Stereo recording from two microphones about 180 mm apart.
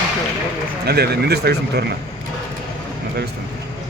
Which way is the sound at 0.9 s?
60° right (ahead or behind).